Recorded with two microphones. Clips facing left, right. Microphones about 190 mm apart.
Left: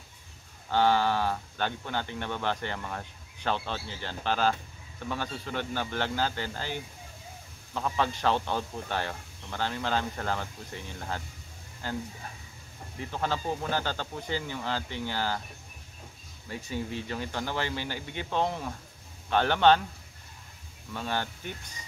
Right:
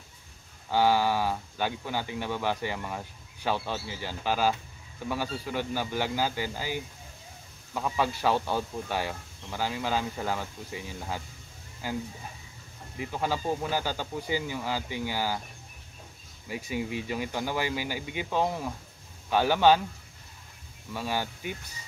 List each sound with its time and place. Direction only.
0.7 s speech: 10° right (ahead or behind)
13.0 s speech: 10° right (ahead or behind)
16.4 s speech: 10° right (ahead or behind)
20.9 s speech: 10° right (ahead or behind)